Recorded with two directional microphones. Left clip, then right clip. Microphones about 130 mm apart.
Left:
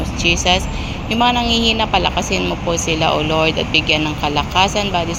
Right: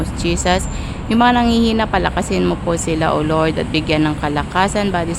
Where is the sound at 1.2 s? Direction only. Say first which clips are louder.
Right 1 dB; 45° right (ahead or behind).